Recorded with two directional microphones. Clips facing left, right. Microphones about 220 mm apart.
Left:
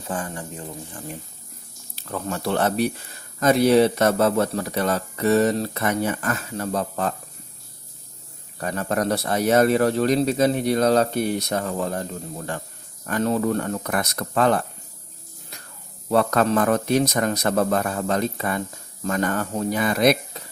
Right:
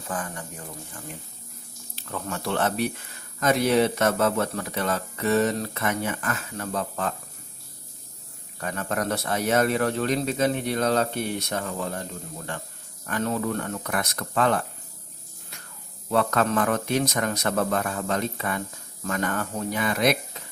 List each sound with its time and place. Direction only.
0.1 s speech: 30° left (ahead or behind)
2.0 s speech: 40° left (ahead or behind)
8.6 s speech: 35° left (ahead or behind)
13.1 s speech: 35° left (ahead or behind)
16.0 s speech: 35° left (ahead or behind)
20.4 s a sound: 35° left (ahead or behind)